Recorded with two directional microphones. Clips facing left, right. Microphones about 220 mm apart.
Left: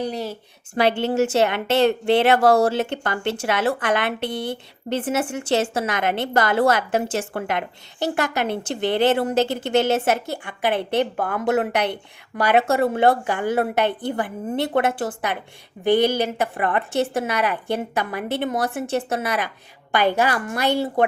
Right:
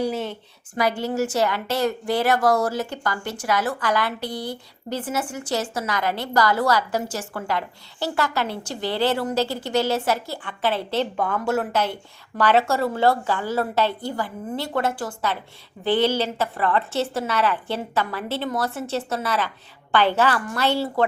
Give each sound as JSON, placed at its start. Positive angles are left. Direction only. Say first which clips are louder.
{"t": 0.0, "sound": "speech", "louder": "right 1 dB", "side_deg": 0}
{"t": 0.8, "sound": "a woman's voice", "louder": "left 4 dB", "side_deg": 25}